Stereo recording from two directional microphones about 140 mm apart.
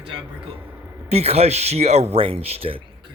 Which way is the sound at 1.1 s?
50° right (ahead or behind).